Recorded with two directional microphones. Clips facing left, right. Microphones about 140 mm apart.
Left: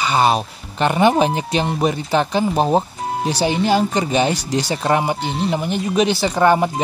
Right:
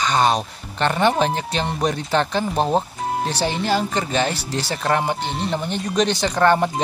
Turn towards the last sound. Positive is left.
turn(degrees=5)  # may be behind; listen again after turning